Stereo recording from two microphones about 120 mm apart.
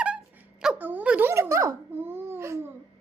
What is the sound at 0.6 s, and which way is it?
Babbling, 15° right (ahead or behind).